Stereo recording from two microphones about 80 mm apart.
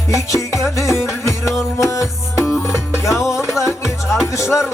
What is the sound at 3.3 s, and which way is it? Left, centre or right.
Music, centre.